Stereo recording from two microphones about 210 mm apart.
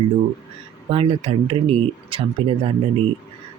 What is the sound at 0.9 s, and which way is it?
Speech, 30° right (ahead or behind).